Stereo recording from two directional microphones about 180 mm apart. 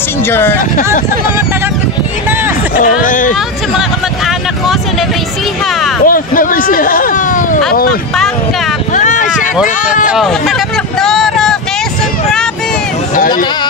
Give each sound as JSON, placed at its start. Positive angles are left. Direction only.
{"t": 0.3, "sound": "speech", "side_deg": 10}
{"t": 2.8, "sound": "speech", "side_deg": 45}
{"t": 6.0, "sound": "a sound", "side_deg": 50}
{"t": 9.3, "sound": "run", "side_deg": -5}
{"t": 10.0, "sound": "vehicle", "side_deg": 0}